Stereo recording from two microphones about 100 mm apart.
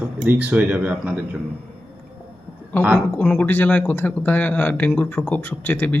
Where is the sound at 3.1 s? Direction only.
15° left (ahead or behind).